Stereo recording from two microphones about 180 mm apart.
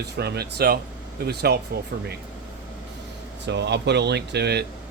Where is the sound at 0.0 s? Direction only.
65° right (ahead or behind).